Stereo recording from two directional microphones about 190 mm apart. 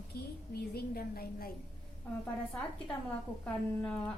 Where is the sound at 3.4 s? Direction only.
5° left (ahead or behind).